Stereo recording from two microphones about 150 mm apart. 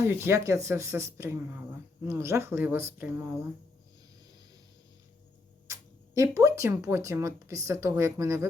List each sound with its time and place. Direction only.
0.0 s speech: 20° right (ahead or behind)
6.3 s speech: 20° right (ahead or behind)